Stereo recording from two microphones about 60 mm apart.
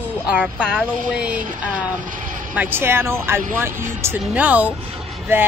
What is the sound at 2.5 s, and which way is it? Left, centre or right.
A woman's voice, right.